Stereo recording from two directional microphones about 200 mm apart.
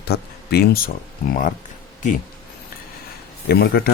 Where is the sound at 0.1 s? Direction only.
50° left (ahead or behind).